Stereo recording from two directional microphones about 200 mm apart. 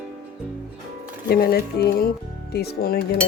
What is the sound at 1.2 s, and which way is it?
A woman's voice, 50° left (ahead or behind).